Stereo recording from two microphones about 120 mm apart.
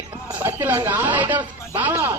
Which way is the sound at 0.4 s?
20° right (ahead or behind).